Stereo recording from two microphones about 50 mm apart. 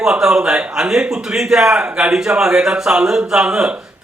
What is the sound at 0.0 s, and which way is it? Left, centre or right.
A man's voice, centre.